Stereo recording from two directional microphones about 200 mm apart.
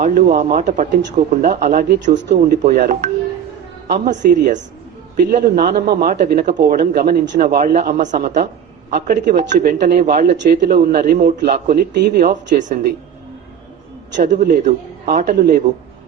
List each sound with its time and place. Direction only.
0.0 s a man's voice: 45° right (ahead or behind)
2.1 s speech: 55° right (ahead or behind)
2.6 s a woman's voice: 40° right (ahead or behind)
3.8 s a woman's voice: 55° right (ahead or behind)
4.1 s a woman's voice: 40° right (ahead or behind)
9.6 s a man's voice: 50° right (ahead or behind)
14.2 s a woman's voice: 40° right (ahead or behind)
15.0 s a man's voice: 50° right (ahead or behind)